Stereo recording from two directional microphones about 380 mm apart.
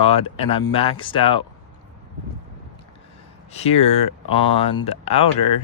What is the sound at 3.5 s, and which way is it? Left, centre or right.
Speech, centre.